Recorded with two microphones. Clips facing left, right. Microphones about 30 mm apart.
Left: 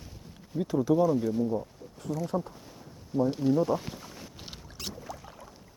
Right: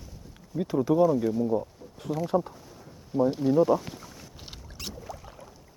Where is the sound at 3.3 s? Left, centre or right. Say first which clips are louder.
Right 5 dB; centre.